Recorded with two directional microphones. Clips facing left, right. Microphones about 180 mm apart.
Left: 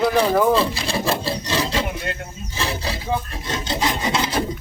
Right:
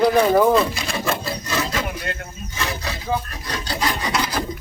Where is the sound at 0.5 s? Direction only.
30° left (ahead or behind).